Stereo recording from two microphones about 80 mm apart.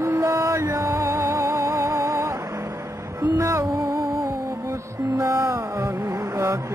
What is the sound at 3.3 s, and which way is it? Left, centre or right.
Music, right.